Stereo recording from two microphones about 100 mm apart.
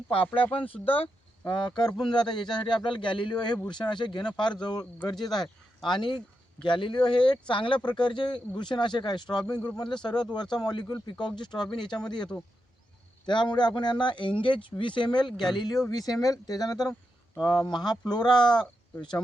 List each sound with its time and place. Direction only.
0.1 s speech: 65° left (ahead or behind)
15.3 s a man's voice: centre (ahead or behind)
15.5 s speech: 45° left (ahead or behind)